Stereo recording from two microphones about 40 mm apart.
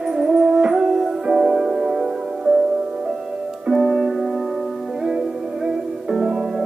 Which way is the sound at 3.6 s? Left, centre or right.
Centre.